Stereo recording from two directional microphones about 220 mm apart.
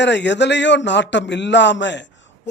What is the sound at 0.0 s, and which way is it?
A man's voice, 55° left (ahead or behind).